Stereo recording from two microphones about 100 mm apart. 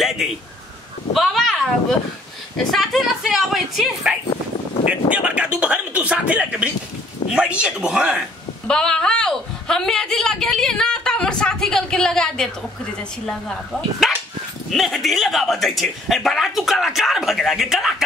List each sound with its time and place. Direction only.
0.2 s a woman's voice: 5° right (ahead or behind)
4.3 s a sound: 80° left
5.1 s speech: 10° right (ahead or behind)
8.6 s a woman's voice: 5° left (ahead or behind)